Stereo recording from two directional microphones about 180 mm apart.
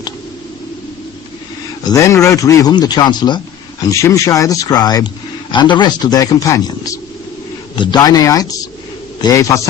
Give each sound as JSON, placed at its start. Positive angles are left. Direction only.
{"t": 1.9, "sound": "a man's voice", "side_deg": 15}